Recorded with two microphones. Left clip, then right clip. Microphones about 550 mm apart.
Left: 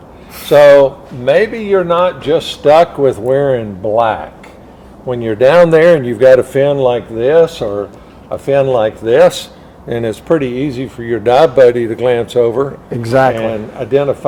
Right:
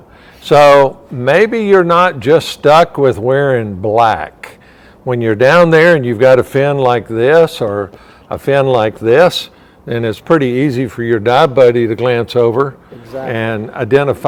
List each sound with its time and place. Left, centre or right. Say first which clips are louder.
0.4 s a man's voice: left 1 dB; right
13.0 s a man's voice: left 15 dB; left
13.3 s a man's voice: even; right